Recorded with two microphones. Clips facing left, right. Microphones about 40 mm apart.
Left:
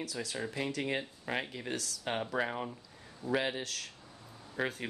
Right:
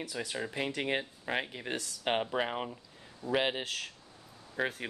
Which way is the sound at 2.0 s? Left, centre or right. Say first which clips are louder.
Right 3 dB; right.